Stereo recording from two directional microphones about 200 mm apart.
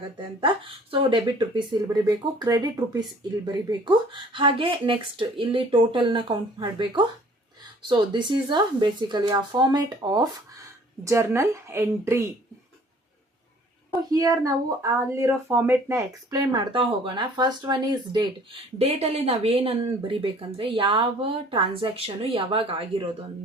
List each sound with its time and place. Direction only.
0.3 s speech: 25° right (ahead or behind)
13.9 s speech: 20° right (ahead or behind)
18.8 s speech: 30° right (ahead or behind)